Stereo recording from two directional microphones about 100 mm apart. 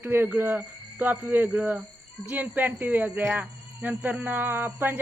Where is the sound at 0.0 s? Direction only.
20° right (ahead or behind).